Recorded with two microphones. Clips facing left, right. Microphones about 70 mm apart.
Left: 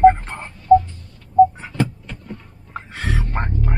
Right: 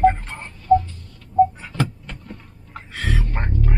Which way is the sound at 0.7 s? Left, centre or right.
Centre.